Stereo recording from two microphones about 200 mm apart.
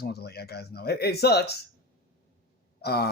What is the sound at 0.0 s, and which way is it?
Speech, 55° left (ahead or behind).